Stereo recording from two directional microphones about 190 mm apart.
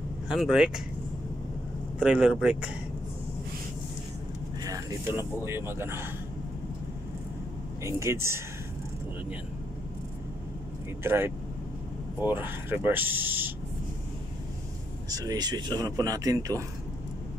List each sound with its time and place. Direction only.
0.3 s speech: centre (ahead or behind)
2.0 s speech: 5° right (ahead or behind)
4.6 s speech: 15° right (ahead or behind)
7.8 s speech: 15° right (ahead or behind)
11.1 s speech: 10° right (ahead or behind)
15.0 s speech: 20° right (ahead or behind)